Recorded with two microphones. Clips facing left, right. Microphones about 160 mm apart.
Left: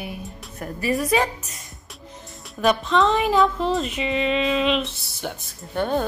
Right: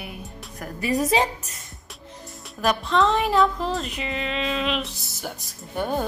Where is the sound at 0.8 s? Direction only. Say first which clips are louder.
Even; 20° right (ahead or behind).